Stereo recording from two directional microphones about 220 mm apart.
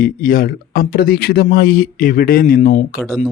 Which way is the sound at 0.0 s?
40° left (ahead or behind).